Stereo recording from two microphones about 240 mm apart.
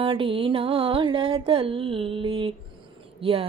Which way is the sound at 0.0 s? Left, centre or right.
Right.